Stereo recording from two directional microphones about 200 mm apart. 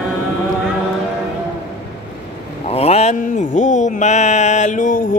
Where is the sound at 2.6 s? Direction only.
30° left (ahead or behind).